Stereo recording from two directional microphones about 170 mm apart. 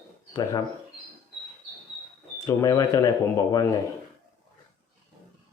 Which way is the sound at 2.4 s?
20° left (ahead or behind).